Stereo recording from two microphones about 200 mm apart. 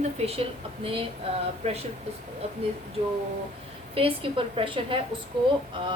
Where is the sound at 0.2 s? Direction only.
30° right (ahead or behind).